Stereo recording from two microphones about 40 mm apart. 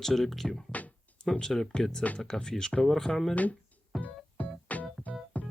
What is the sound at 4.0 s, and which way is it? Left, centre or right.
Music, left.